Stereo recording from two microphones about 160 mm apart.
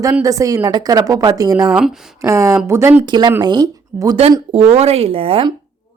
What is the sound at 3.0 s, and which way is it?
A woman's voice, 25° right (ahead or behind).